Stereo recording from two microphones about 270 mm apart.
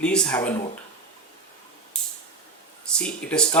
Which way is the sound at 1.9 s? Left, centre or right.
Centre.